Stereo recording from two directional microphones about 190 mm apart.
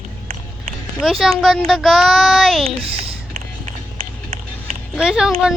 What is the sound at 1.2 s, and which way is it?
A child's voice, centre (ahead or behind).